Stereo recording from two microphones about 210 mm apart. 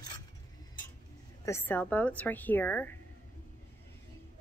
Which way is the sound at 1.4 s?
10° left (ahead or behind).